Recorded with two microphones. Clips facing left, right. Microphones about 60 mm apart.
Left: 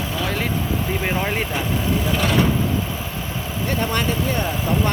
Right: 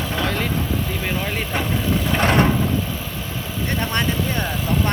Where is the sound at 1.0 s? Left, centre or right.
Centre.